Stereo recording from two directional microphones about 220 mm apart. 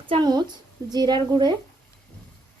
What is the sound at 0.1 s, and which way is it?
A woman's voice, 20° right (ahead or behind).